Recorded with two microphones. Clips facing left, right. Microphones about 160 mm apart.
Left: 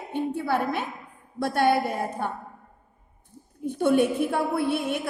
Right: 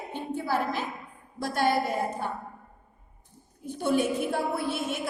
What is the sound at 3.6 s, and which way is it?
A woman's voice, 60° left (ahead or behind).